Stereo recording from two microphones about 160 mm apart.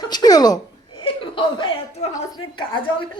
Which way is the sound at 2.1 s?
30° left (ahead or behind).